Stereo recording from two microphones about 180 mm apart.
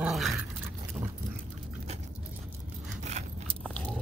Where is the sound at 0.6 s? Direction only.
10° right (ahead or behind).